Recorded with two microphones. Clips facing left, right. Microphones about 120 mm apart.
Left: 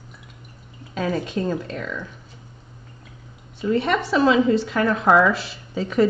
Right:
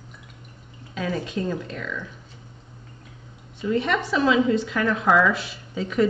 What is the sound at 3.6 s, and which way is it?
Speech, 35° left (ahead or behind).